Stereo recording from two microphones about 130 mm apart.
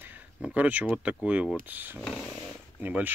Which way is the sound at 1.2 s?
10° right (ahead or behind).